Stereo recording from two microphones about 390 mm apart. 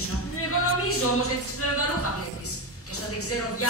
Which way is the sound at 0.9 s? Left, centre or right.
Left.